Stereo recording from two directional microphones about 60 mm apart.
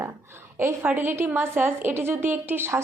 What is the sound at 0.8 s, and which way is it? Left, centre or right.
A woman's voice, right.